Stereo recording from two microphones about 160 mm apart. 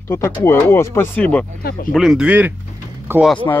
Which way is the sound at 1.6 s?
70° left (ahead or behind).